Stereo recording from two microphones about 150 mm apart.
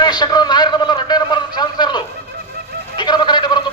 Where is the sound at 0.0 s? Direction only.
30° left (ahead or behind).